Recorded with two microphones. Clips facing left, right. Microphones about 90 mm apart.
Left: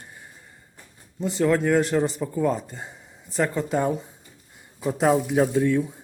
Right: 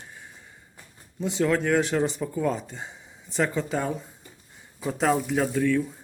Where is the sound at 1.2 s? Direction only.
Centre (ahead or behind).